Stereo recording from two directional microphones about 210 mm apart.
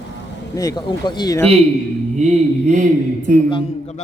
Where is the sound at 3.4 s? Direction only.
25° left (ahead or behind).